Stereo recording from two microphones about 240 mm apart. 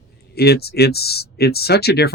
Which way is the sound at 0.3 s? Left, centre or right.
Left.